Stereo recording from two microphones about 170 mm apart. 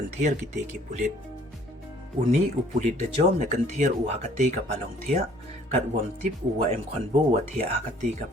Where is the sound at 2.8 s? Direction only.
45° right (ahead or behind).